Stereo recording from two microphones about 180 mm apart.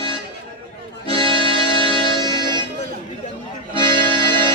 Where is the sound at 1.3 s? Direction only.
30° right (ahead or behind).